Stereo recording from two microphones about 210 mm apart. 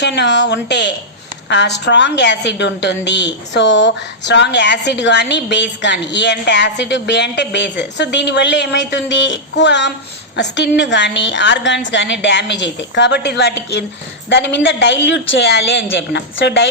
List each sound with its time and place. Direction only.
0.0 s a woman's voice: 55° left (ahead or behind)